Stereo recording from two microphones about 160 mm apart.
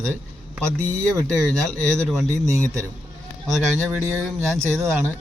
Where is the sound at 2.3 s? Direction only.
20° right (ahead or behind).